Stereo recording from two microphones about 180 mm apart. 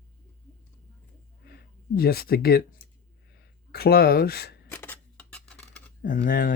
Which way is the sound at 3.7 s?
55° left (ahead or behind).